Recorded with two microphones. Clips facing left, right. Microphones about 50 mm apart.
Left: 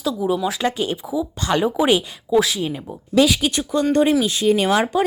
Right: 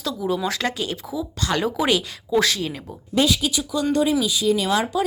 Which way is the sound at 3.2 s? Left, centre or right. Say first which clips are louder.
Left 4 dB; left.